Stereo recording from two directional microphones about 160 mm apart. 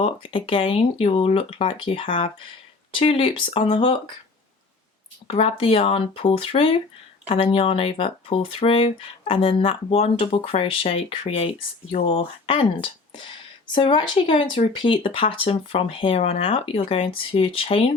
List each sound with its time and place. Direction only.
0.0 s speech: 35° left (ahead or behind)
5.3 s speech: 35° left (ahead or behind)